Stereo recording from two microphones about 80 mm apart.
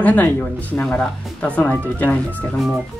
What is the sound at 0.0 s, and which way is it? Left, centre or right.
Speech, left.